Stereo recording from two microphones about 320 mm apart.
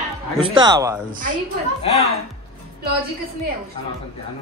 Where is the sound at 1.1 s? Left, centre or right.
Right.